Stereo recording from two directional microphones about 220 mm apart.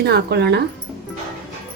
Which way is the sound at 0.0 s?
45° right (ahead or behind).